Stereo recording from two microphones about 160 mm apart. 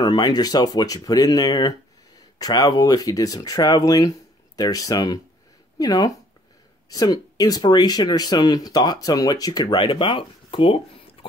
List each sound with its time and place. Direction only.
0.0 s speech: 25° left (ahead or behind)